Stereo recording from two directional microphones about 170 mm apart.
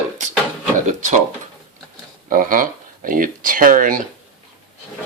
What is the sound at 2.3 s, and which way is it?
Speech, 55° right (ahead or behind).